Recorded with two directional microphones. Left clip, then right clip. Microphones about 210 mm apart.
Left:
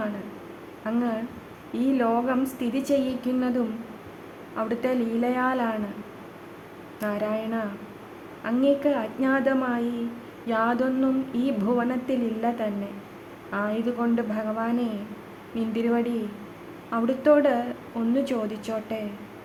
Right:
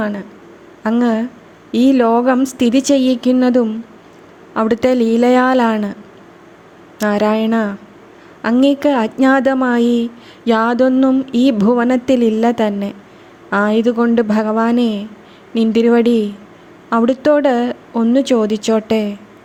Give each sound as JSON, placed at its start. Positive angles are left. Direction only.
{"t": 0.9, "sound": "speech", "side_deg": -40}
{"t": 7.0, "sound": "a woman's voice", "side_deg": -40}